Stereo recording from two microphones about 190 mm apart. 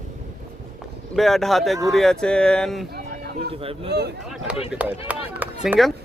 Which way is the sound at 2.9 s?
55° right (ahead or behind).